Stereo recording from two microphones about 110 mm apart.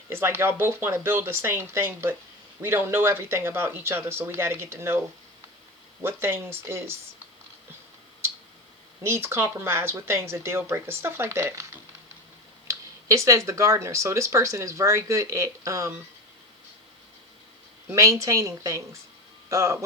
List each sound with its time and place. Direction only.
0.1 s speech: 25° right (ahead or behind)
6.0 s speech: 20° right (ahead or behind)
9.0 s speech: 25° right (ahead or behind)
12.6 s speech: 30° right (ahead or behind)
17.8 s speech: 30° right (ahead or behind)